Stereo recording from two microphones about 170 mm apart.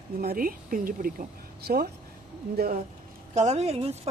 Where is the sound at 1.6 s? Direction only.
65° right (ahead or behind).